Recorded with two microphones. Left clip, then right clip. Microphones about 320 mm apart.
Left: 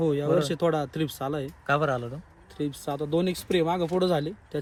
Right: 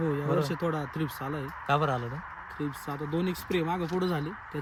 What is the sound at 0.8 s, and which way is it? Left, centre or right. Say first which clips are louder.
Speech: left 4 dB; left.